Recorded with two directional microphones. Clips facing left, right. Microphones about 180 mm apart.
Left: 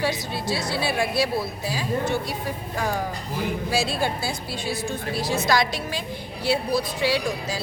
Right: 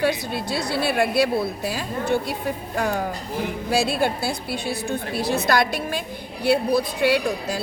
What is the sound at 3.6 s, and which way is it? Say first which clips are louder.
A woman's voice: right 5 dB; 55° right (ahead or behind).